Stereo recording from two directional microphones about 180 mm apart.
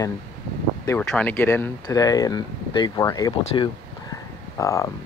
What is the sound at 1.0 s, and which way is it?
Speech, 10° left (ahead or behind).